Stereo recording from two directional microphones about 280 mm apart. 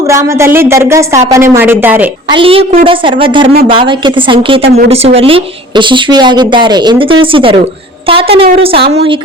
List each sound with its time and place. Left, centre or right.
0.1 s speech: centre
2.4 s a woman's voice: centre